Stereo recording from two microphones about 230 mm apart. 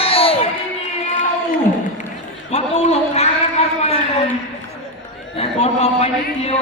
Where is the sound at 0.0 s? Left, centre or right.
Left.